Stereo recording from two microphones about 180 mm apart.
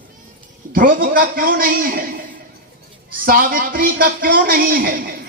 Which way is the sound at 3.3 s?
50° right (ahead or behind).